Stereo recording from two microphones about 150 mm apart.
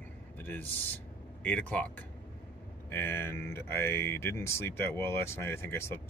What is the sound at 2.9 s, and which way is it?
Speech, 15° left (ahead or behind).